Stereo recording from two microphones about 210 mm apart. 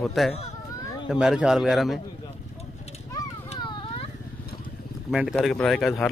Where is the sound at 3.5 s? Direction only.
30° left (ahead or behind).